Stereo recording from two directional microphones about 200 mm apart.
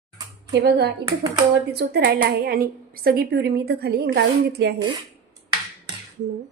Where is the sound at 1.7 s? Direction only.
55° right (ahead or behind).